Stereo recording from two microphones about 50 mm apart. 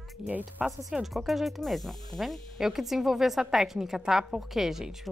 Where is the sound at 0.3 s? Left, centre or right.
Right.